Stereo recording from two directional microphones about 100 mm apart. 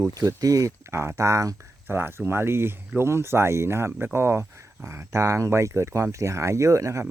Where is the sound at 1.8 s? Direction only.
20° right (ahead or behind).